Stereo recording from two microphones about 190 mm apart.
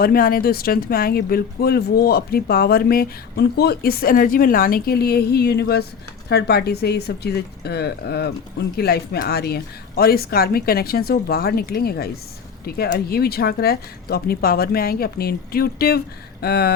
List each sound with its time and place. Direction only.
0.0 s speech: 50° left (ahead or behind)